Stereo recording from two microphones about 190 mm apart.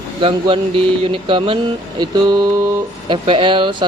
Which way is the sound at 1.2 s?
30° right (ahead or behind).